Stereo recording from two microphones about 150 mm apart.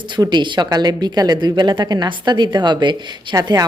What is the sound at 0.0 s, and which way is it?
A woman's voice, 30° right (ahead or behind).